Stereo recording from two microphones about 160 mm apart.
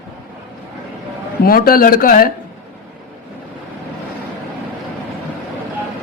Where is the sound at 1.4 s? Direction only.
65° left (ahead or behind).